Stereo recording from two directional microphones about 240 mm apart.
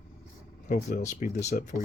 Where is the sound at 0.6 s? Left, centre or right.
Left.